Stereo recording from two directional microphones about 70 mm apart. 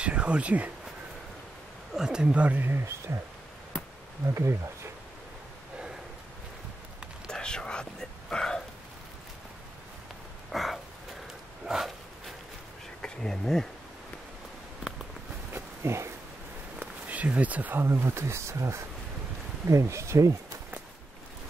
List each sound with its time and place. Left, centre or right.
0.0 s speech: centre
2.0 s speech: centre; by 3.2 s right
4.3 s speech: right
7.2 s whispering: centre
10.5 s a sound: centre
13.0 s speech: centre
15.5 s a sound: right
16.8 s a sound: right
17.8 s speech: right